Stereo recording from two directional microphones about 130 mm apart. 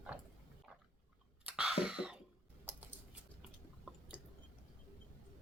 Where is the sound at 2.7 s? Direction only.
10° right (ahead or behind).